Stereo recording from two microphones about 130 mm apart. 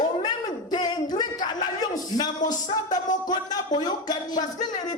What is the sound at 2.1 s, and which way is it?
Music, 30° left (ahead or behind).